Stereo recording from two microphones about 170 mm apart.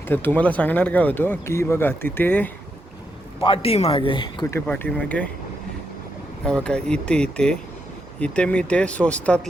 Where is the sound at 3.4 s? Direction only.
30° left (ahead or behind).